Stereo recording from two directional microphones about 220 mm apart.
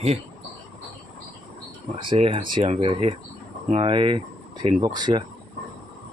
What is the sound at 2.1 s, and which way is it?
Speech, 25° right (ahead or behind).